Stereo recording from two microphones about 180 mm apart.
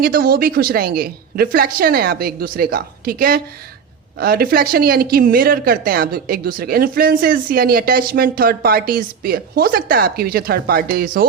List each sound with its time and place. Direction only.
0.0 s speech: 55° right (ahead or behind)